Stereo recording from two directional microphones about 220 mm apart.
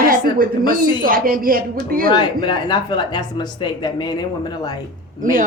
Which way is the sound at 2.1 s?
20° left (ahead or behind).